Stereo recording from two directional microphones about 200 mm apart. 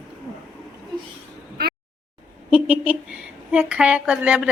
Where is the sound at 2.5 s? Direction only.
5° right (ahead or behind).